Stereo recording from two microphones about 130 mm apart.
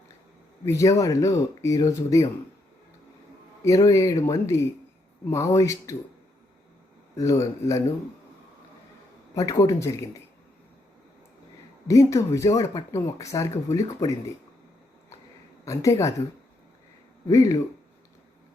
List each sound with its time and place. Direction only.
0.6 s speech: 20° left (ahead or behind)
3.6 s speech: 25° left (ahead or behind)
7.2 s speech: 25° left (ahead or behind)
9.3 s speech: 25° left (ahead or behind)
11.9 s speech: 25° left (ahead or behind)
15.6 s speech: 25° left (ahead or behind)
17.2 s speech: 25° left (ahead or behind)